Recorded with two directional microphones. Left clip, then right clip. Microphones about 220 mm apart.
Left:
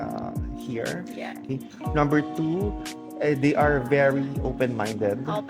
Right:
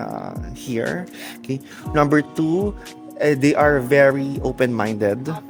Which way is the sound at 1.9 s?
55° right (ahead or behind).